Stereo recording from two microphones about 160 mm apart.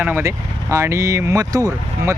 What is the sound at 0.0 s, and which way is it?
Speech, 15° right (ahead or behind).